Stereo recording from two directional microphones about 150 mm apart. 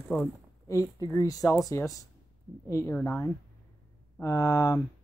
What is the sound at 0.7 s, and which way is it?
Speech, 25° left (ahead or behind).